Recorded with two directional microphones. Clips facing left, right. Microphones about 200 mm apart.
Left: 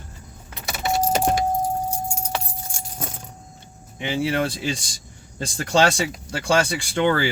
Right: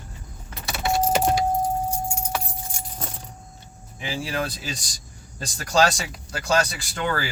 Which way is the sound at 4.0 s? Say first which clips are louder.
Left 5 dB; 25° left (ahead or behind).